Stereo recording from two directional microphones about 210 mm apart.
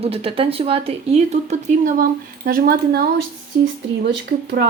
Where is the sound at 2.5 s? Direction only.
45° right (ahead or behind).